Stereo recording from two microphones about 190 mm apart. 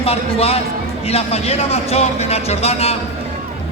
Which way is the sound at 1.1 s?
30° left (ahead or behind).